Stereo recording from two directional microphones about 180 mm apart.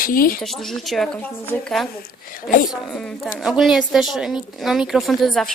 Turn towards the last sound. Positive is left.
turn(degrees=0)  # may be behind; listen again after turning